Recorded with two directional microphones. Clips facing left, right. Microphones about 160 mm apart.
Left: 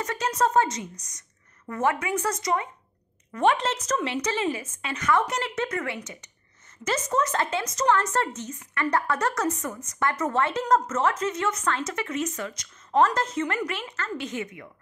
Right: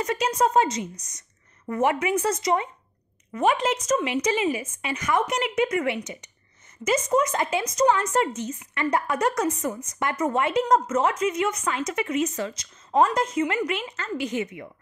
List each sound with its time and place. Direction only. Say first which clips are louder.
0.0 s a woman's voice: right 2 dB; 20° right (ahead or behind)
3.3 s a woman's voice: right 1 dB; 10° right (ahead or behind); by 12.6 s 25° right (ahead or behind)
13.0 s a woman's voice: right 2 dB; 15° right (ahead or behind)